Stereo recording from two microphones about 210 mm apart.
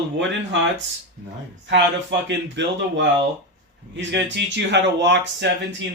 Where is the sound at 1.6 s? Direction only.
55° right (ahead or behind).